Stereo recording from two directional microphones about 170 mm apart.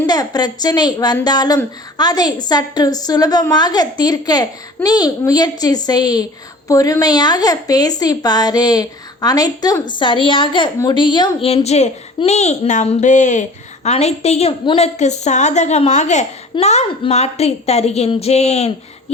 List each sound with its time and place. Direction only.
0.1 s a woman's voice: 25° left (ahead or behind)
14.9 s speech: 40° left (ahead or behind)